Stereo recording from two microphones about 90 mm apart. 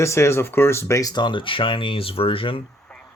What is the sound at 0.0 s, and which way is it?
Speech, 30° left (ahead or behind).